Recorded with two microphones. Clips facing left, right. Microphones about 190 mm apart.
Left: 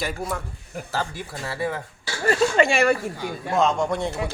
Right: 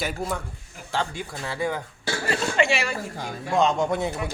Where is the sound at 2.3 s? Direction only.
45° left (ahead or behind).